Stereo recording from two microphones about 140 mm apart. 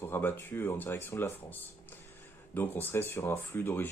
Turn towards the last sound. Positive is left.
turn(degrees=15)  # may be behind; listen again after turning